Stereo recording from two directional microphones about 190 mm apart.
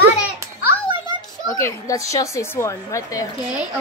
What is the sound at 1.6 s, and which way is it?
A woman's voice, 15° left (ahead or behind).